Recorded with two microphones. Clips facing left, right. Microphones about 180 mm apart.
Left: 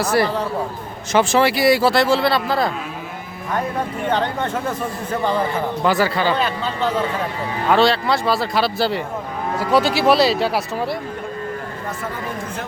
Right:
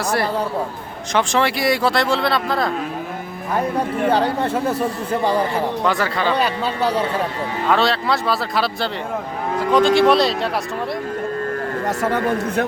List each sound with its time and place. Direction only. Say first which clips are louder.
0.0 s speech: left 2 dB; centre (ahead or behind)
5.8 s speech: left 5 dB; 5° left (ahead or behind)
6.3 s speech: right 1 dB; 10° right (ahead or behind)
7.7 s speech: left 3 dB; centre (ahead or behind)
11.9 s speech: right 9 dB; 75° right (ahead or behind)